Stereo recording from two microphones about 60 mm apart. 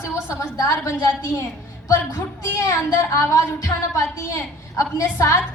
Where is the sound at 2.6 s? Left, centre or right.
Left.